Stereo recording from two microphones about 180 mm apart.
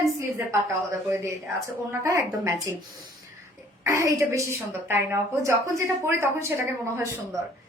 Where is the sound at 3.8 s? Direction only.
15° right (ahead or behind).